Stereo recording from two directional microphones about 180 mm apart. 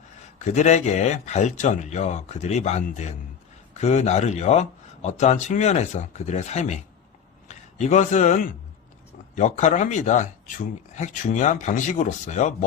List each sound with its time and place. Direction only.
0.4 s speech: 40° left (ahead or behind)
7.4 s a sound: 40° left (ahead or behind)
9.3 s speech: 40° left (ahead or behind)